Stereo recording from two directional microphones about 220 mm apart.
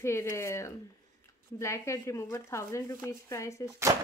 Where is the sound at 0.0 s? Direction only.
10° left (ahead or behind).